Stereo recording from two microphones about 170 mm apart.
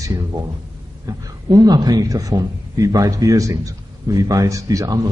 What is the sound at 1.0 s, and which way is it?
A man's voice, 20° right (ahead or behind).